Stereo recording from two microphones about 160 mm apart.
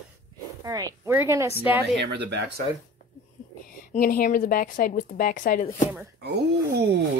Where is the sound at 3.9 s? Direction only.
60° left (ahead or behind).